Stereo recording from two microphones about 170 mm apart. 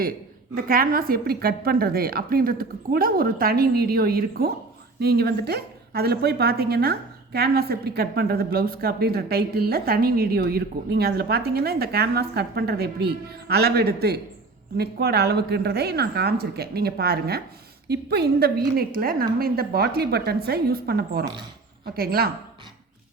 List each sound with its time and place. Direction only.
0.5 s a woman's voice: 60° right (ahead or behind)